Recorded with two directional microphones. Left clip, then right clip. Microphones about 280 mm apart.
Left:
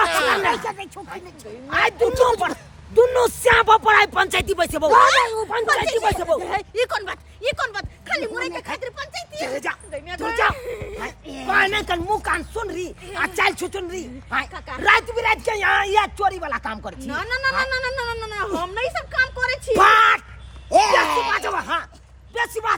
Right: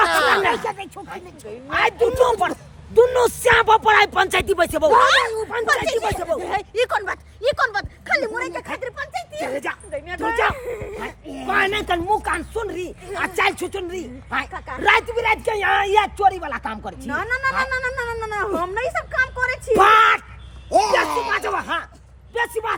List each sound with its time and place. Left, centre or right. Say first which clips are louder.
0.3 s speech: right 2 dB; centre
5.2 s speech: left 1 dB; left
5.6 s speech: even; centre
6.1 s speech: left 2 dB; left
6.4 s speech: right 1 dB; centre
7.0 s speech: right 3 dB; centre
8.3 s speech: right 1 dB; centre